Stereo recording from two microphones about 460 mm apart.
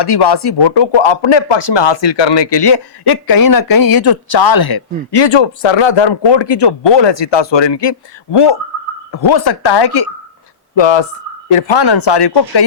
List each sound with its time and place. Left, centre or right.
0.0 s speech: left
10.8 s speech: left
11.4 s speech: left
11.8 s speech: left